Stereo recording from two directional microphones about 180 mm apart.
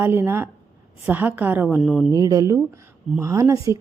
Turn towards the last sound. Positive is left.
turn(degrees=-15)  # may be behind; listen again after turning